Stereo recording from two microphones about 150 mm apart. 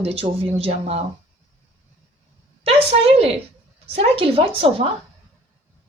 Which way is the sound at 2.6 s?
40° right (ahead or behind).